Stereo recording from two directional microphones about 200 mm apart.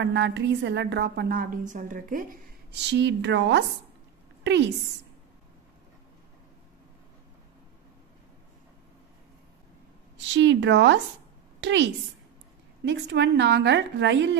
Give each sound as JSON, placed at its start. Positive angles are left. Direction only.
{"t": 0.0, "sound": "a woman's voice", "side_deg": -60}
{"t": 2.9, "sound": "a woman's voice", "side_deg": -65}
{"t": 10.1, "sound": "a woman's voice", "side_deg": -65}